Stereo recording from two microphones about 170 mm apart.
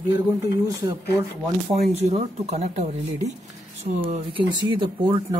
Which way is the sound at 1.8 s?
35° right (ahead or behind).